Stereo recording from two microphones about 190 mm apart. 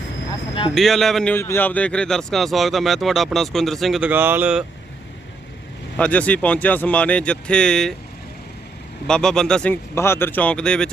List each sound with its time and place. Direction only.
0.7 s a man's voice: centre (ahead or behind)
6.0 s speech: 5° left (ahead or behind)
9.0 s a man's voice: 5° left (ahead or behind)